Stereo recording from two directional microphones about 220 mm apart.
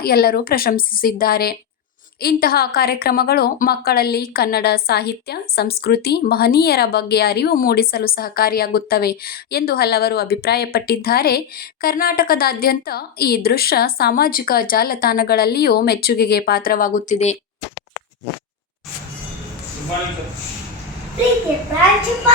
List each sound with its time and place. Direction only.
0.0 s a woman's voice: 45° left (ahead or behind)